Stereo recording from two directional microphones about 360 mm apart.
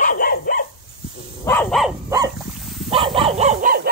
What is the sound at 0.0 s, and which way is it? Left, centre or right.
Dog, left.